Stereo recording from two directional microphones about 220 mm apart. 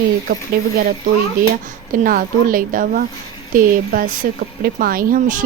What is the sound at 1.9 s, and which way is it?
Speech, 40° right (ahead or behind).